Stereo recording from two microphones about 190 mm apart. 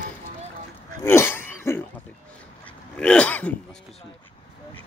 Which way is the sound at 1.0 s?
15° left (ahead or behind).